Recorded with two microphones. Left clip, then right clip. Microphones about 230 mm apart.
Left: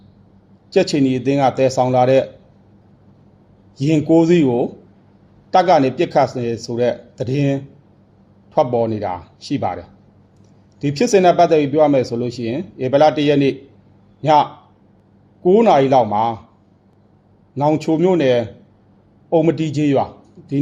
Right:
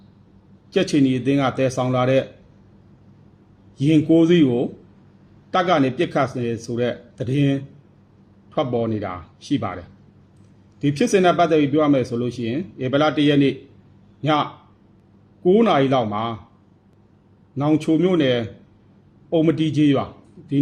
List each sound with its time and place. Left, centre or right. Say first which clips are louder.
0.7 s speech: left 3 dB; centre
3.8 s a man's voice: left 2 dB; centre
15.4 s speech: left 5 dB; centre
17.5 s speech: left 3 dB; centre